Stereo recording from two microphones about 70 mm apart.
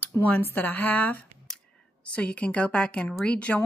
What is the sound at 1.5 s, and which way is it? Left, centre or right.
Whispering, centre.